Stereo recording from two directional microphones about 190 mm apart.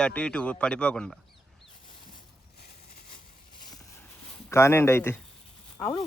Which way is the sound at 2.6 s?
55° left (ahead or behind).